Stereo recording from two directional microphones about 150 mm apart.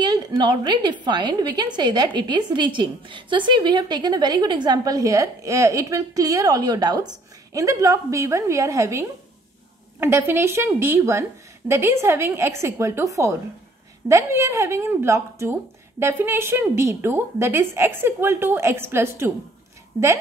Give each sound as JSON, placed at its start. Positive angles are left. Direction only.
{"t": 0.0, "sound": "a woman's voice", "side_deg": -30}